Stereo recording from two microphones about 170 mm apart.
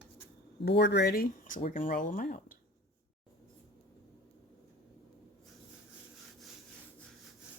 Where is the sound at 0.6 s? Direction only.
85° left; by 2.5 s 55° left (ahead or behind).